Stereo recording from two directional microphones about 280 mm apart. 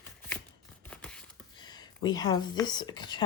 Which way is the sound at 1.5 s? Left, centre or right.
Centre.